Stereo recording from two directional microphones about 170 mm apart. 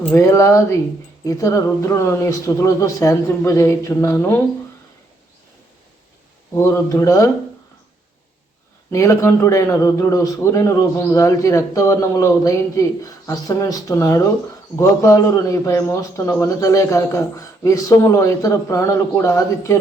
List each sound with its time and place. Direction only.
0.0 s a man's voice: 15° left (ahead or behind)
6.5 s speech: 15° left (ahead or behind)
8.9 s a man's voice: 15° left (ahead or behind)